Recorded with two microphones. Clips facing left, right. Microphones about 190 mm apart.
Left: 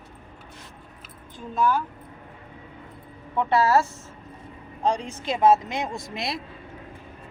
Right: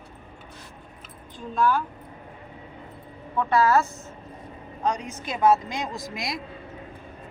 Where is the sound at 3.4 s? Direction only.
25° left (ahead or behind).